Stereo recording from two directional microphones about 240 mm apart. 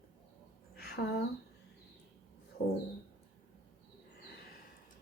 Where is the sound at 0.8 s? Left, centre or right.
Left.